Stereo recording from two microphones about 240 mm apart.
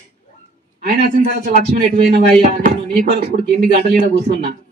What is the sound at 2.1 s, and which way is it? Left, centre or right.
A man's voice, right.